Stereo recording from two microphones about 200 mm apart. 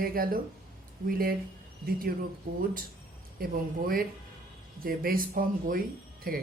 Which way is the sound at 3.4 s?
45° right (ahead or behind).